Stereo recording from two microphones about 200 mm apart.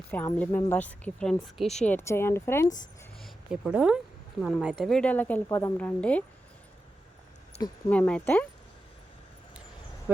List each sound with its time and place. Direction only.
0.3 s speech: 10° left (ahead or behind)
3.2 s speech: centre (ahead or behind)
7.9 s speech: 5° left (ahead or behind)